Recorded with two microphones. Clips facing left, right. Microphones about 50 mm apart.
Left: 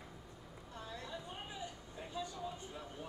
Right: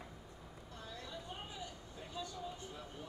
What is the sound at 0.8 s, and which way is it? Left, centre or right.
Vehicle, left.